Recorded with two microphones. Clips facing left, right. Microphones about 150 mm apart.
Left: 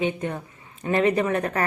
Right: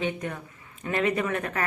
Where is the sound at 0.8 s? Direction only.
35° left (ahead or behind).